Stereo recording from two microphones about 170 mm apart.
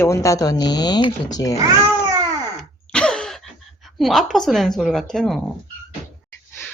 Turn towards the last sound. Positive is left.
turn(degrees=0)  # may be behind; listen again after turning